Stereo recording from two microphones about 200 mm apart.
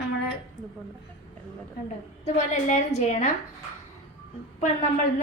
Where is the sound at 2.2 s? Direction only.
35° left (ahead or behind).